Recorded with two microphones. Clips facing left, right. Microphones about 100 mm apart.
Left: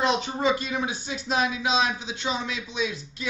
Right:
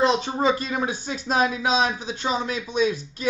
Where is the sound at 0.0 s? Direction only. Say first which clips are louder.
Right 3 dB; 30° right (ahead or behind).